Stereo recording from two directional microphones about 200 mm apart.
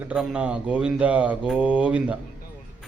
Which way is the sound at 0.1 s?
5° right (ahead or behind).